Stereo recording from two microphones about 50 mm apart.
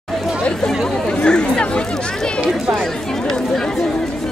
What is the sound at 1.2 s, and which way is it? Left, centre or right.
Chatter, centre.